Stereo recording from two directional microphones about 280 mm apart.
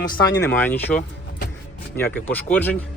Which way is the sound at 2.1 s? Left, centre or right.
Centre.